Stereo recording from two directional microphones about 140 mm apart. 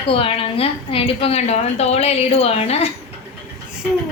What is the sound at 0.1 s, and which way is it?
A woman's voice, 40° left (ahead or behind).